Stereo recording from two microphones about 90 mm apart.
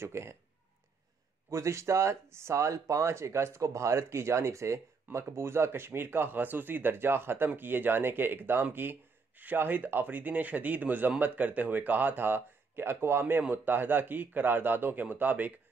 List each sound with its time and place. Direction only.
0.0 s speech: 30° right (ahead or behind)
1.5 s speech: 35° right (ahead or behind)